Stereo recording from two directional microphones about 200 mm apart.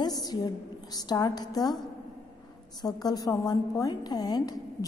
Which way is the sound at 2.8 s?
20° left (ahead or behind).